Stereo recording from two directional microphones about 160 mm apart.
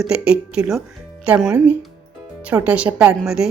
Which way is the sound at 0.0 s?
5° right (ahead or behind).